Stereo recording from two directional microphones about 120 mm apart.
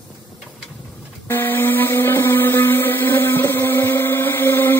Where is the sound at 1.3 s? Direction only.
15° left (ahead or behind).